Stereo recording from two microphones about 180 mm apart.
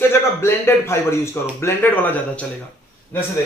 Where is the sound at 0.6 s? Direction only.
15° left (ahead or behind).